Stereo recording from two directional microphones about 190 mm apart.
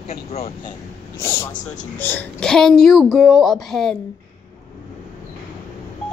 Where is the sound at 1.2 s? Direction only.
15° left (ahead or behind).